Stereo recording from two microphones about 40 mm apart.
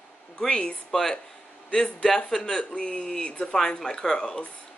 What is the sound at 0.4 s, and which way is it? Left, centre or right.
Speech, left.